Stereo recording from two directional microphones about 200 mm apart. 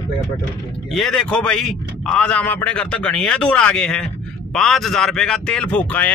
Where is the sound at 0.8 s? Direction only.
Centre (ahead or behind).